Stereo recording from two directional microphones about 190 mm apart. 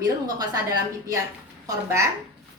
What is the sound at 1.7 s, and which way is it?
Speech, 15° right (ahead or behind).